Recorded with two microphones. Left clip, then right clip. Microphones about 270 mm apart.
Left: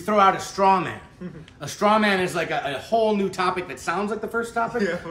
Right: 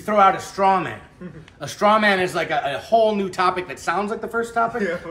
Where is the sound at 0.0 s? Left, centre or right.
Centre.